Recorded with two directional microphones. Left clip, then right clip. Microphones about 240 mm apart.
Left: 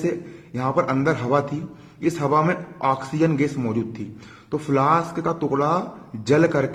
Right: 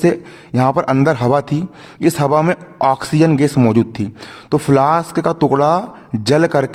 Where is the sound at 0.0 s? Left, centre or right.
Right.